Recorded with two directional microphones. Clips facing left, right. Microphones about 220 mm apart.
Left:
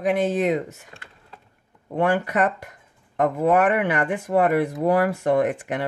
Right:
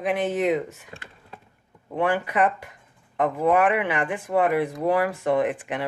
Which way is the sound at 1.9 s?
45° left (ahead or behind).